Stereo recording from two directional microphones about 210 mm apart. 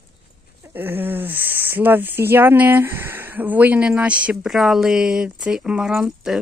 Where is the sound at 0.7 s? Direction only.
10° right (ahead or behind).